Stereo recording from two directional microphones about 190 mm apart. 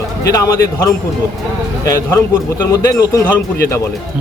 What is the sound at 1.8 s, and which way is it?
Speech, 15° left (ahead or behind).